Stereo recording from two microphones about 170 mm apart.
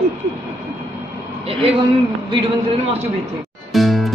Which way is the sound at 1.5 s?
35° right (ahead or behind).